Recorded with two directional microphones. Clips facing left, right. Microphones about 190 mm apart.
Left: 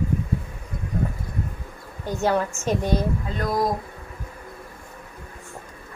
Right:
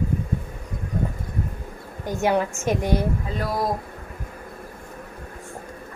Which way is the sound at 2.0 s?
15° right (ahead or behind).